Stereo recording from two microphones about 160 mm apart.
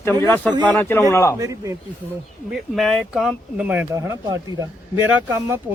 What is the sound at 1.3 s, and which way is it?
Speech, 20° right (ahead or behind).